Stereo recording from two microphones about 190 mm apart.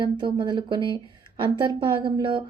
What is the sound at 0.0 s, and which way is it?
Speech, 25° right (ahead or behind).